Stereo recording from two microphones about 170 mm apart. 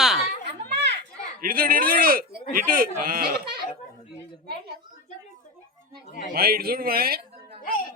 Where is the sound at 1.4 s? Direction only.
60° right (ahead or behind).